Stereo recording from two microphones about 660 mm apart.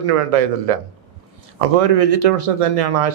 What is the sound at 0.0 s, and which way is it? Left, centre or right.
Speech, right.